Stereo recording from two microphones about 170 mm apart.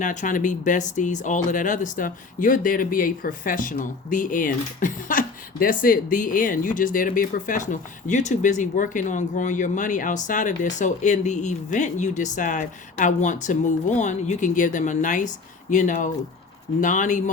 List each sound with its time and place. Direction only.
0.0 s speech: 45° left (ahead or behind)